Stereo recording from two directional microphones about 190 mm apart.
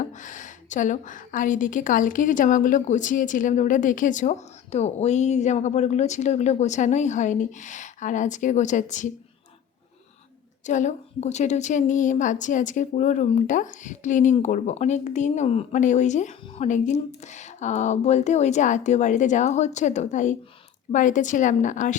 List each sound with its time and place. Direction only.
0.0 s a woman's voice: 40° left (ahead or behind)
10.7 s a woman's voice: 40° left (ahead or behind)